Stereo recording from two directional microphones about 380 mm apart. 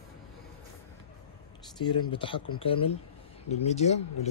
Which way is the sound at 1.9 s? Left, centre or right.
Centre.